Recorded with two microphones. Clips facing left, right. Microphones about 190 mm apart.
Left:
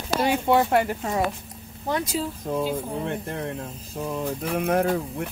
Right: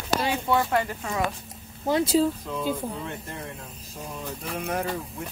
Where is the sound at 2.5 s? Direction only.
60° left (ahead or behind).